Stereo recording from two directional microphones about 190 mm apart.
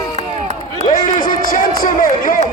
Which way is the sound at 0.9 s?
45° left (ahead or behind).